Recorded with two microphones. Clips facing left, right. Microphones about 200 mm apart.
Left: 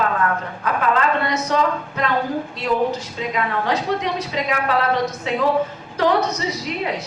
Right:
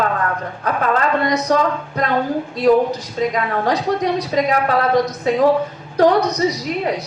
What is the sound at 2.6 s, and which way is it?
A woman's voice, 40° right (ahead or behind).